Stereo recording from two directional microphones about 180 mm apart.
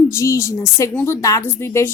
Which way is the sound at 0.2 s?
15° left (ahead or behind).